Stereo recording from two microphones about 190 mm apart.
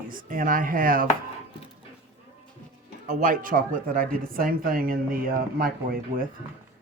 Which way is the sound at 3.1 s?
45° right (ahead or behind).